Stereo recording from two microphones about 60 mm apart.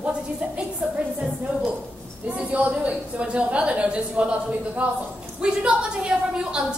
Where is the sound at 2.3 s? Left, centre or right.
Right.